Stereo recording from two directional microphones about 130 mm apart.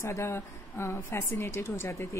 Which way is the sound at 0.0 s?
20° left (ahead or behind).